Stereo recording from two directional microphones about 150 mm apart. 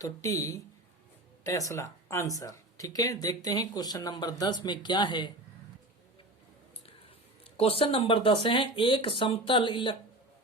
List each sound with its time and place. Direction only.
0.0 s speech: 20° left (ahead or behind)
7.5 s speech: 40° left (ahead or behind)